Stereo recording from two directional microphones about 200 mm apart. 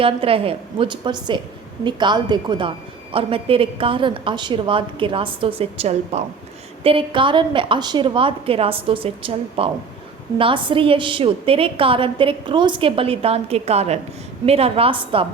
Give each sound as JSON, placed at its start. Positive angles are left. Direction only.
{"t": 0.0, "sound": "a woman's voice", "side_deg": -30}